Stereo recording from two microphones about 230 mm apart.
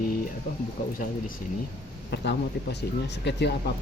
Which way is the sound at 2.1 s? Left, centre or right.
Left.